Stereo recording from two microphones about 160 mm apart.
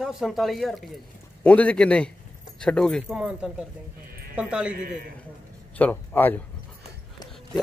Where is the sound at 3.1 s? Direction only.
5° right (ahead or behind).